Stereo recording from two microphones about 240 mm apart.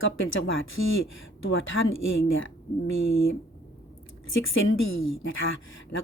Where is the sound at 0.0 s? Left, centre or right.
Left.